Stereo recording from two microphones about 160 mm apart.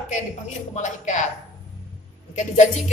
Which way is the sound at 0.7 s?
50° left (ahead or behind).